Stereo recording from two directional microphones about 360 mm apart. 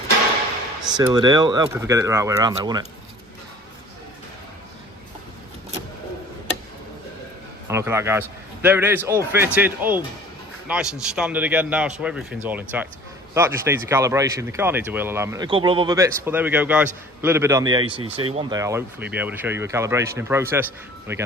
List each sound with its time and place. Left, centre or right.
0.8 s speech: centre
7.7 s a man's voice: centre